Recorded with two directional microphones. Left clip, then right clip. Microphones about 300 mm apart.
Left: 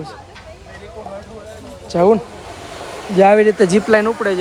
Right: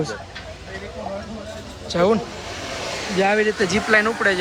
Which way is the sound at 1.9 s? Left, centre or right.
Centre.